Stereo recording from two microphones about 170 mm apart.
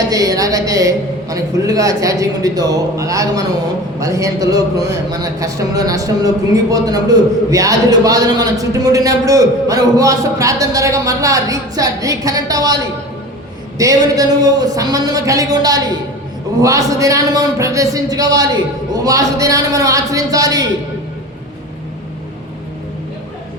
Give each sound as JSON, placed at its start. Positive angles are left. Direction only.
{"t": 0.0, "sound": "a man's voice", "side_deg": -20}